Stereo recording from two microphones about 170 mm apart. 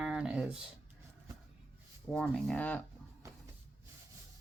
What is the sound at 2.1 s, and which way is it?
Speech, 5° left (ahead or behind).